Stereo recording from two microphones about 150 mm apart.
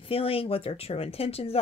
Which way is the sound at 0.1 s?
40° left (ahead or behind).